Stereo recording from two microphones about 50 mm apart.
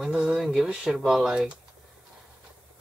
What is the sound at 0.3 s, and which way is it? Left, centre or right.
Speech, centre.